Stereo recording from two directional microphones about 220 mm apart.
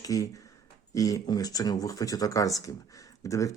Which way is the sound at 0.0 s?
15° left (ahead or behind).